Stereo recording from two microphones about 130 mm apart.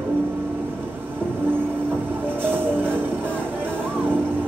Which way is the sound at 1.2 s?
15° right (ahead or behind).